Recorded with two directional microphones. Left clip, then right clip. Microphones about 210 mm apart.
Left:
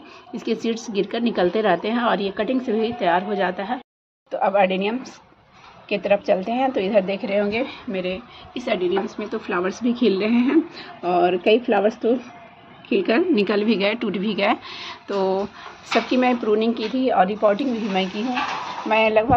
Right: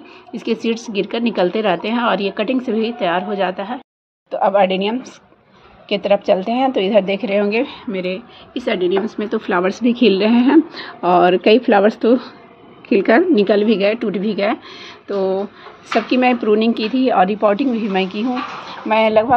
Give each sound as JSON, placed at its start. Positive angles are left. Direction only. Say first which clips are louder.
{"t": 0.3, "sound": "a woman's voice", "louder": "right 4 dB", "side_deg": -15}
{"t": 9.2, "sound": "a woman's voice", "louder": "right 6 dB", "side_deg": -35}
{"t": 10.1, "sound": "a woman's voice", "louder": "right 6 dB", "side_deg": 0}
{"t": 11.0, "sound": "speech", "louder": "right 7 dB", "side_deg": -35}
{"t": 13.3, "sound": "a woman's voice", "louder": "right 6 dB", "side_deg": -10}
{"t": 16.1, "sound": "a woman's voice", "louder": "right 6 dB", "side_deg": -15}
{"t": 18.3, "sound": "a woman's voice", "louder": "even", "side_deg": 0}
{"t": 18.9, "sound": "a woman's voice", "louder": "right 4 dB", "side_deg": -20}